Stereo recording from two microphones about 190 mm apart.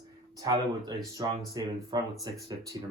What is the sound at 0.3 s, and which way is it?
Speech, 20° right (ahead or behind).